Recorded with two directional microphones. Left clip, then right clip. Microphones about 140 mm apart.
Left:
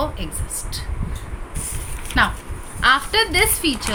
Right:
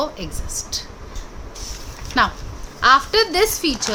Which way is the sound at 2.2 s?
50° right (ahead or behind).